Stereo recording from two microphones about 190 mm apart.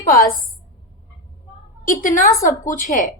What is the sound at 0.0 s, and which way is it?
Speech, 50° left (ahead or behind).